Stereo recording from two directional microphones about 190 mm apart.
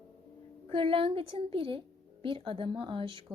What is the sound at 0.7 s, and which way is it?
Speech, 30° right (ahead or behind).